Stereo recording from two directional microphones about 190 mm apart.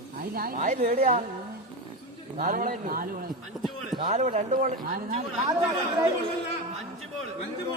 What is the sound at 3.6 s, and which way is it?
Speech, centre (ahead or behind).